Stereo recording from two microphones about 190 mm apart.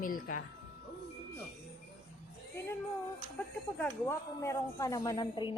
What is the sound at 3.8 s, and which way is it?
A woman's voice, 15° left (ahead or behind).